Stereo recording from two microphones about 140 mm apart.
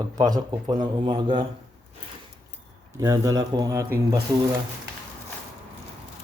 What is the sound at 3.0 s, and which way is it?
Speech, 25° right (ahead or behind).